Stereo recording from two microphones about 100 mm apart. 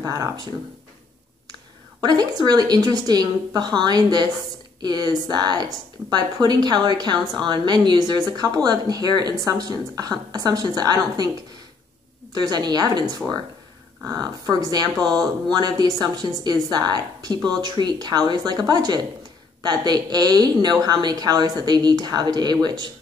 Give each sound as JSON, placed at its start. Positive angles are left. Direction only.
{"t": 0.0, "sound": "a woman's voice", "side_deg": -35}
{"t": 1.5, "sound": "a woman's voice", "side_deg": -45}
{"t": 12.4, "sound": "speech", "side_deg": -45}
{"t": 14.0, "sound": "speech", "side_deg": -40}